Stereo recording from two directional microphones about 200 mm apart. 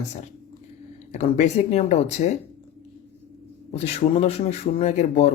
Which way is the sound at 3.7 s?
35° left (ahead or behind).